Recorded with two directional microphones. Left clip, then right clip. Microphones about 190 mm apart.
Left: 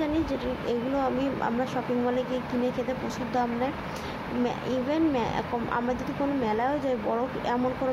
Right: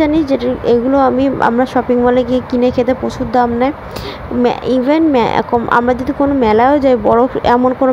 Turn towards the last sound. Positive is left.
turn(degrees=-45)  # may be behind; listen again after turning